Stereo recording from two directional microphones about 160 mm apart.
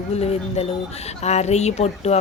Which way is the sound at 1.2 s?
45° left (ahead or behind).